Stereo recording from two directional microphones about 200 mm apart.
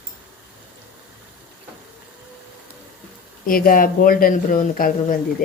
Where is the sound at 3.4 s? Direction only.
45° left (ahead or behind).